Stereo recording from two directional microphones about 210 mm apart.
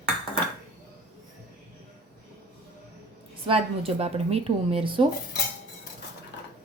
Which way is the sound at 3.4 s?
25° right (ahead or behind).